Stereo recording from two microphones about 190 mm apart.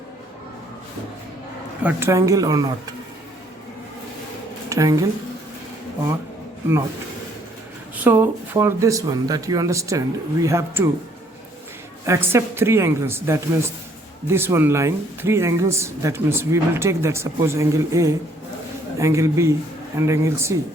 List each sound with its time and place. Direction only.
1.8 s speech: 10° right (ahead or behind)
4.7 s speech: 20° right (ahead or behind)
8.0 s speech: 10° right (ahead or behind)
12.0 s speech: 15° right (ahead or behind)